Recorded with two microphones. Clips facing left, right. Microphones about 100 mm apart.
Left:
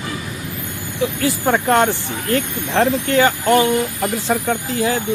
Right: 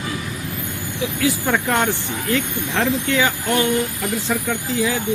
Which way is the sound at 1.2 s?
45° left (ahead or behind).